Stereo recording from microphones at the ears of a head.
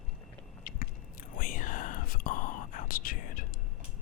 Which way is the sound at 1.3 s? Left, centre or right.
Left.